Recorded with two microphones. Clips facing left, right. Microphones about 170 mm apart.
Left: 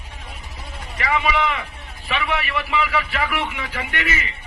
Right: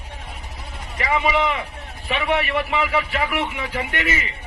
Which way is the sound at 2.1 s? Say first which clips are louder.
Right 3 dB; 40° right (ahead or behind).